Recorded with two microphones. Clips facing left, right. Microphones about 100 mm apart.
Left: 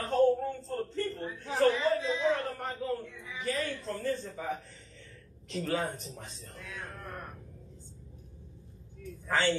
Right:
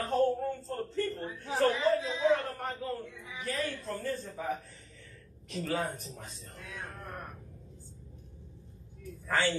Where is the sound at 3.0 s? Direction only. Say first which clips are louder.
Even; 20° right (ahead or behind).